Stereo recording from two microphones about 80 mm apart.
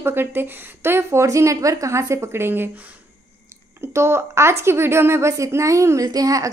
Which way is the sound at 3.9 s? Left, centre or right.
Right.